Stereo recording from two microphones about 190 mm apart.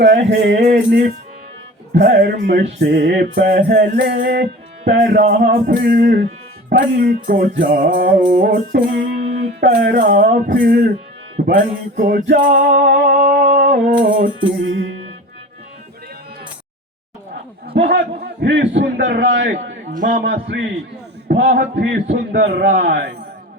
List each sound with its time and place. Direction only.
0.0 s a man's voice: 60° right (ahead or behind)
6.7 s music: 55° right (ahead or behind)
9.2 s a sound: 35° right (ahead or behind)
9.6 s music: 60° right (ahead or behind)
17.7 s a man's voice: 70° right (ahead or behind)
19.9 s a man's voice: 45° right (ahead or behind)
20.2 s a man's voice: 60° right (ahead or behind)